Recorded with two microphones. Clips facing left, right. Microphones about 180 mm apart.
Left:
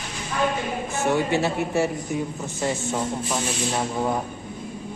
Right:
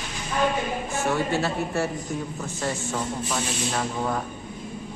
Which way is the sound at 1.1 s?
20° left (ahead or behind).